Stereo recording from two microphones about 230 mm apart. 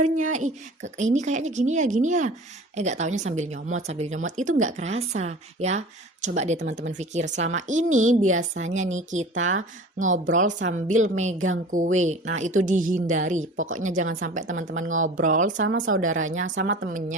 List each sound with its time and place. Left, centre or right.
0.0 s speech: right
0.3 s a woman's voice: right
8.3 s speech: right
8.6 s a woman's voice: right
9.6 s speech: right
10.3 s a woman's voice: right
13.6 s speech: right
13.8 s a woman's voice: right
14.7 s speech: right
15.2 s a woman's voice: right
15.6 s speech: right